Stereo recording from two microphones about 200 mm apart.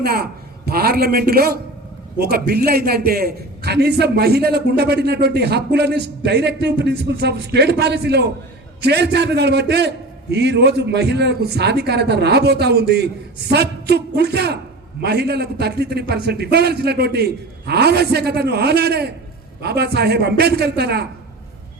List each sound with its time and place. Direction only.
0.0 s a man's voice: 50° right (ahead or behind)